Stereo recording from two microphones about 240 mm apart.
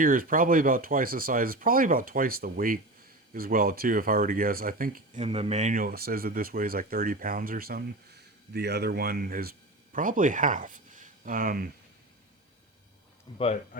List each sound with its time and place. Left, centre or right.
0.0 s speech: right